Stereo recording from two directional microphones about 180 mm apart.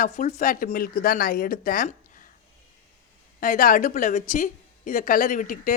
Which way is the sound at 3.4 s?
50° left (ahead or behind).